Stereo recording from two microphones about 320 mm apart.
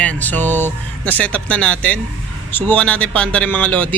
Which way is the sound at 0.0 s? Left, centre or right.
Centre.